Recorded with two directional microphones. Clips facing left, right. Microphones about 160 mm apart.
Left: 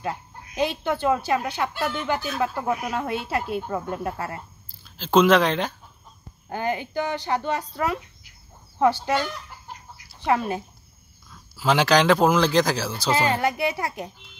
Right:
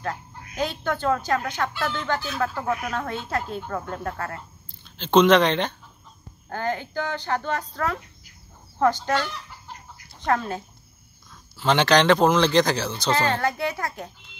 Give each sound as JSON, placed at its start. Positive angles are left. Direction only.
{"t": 0.0, "sound": "a man's voice", "side_deg": 15}